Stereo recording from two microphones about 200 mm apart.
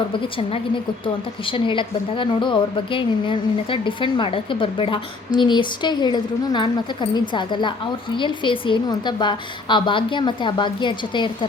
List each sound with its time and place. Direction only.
1.0 s a woman's voice: 25° left (ahead or behind)